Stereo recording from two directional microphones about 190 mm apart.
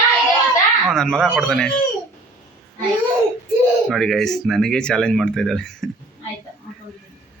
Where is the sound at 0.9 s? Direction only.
5° left (ahead or behind).